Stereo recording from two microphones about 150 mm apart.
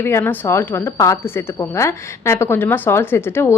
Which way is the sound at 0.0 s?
15° left (ahead or behind).